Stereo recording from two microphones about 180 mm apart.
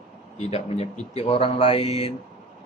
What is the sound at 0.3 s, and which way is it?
A man's voice, 35° left (ahead or behind).